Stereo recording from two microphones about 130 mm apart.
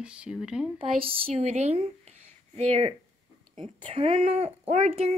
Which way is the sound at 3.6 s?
45° right (ahead or behind).